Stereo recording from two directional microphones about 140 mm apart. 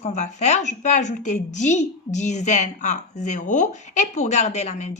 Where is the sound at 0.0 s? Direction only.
55° left (ahead or behind).